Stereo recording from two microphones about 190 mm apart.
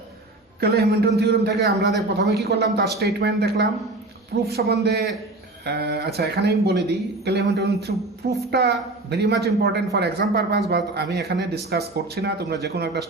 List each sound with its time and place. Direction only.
0.6 s a woman's voice: 55° right (ahead or behind)